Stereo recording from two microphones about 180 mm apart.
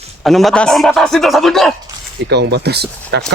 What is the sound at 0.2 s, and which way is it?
Speech, centre (ahead or behind).